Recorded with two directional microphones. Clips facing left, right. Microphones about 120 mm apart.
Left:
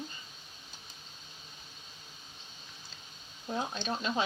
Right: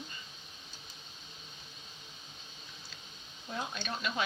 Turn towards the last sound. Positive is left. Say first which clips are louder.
# left 4 dB
turn(degrees=30)  # may be behind; listen again after turning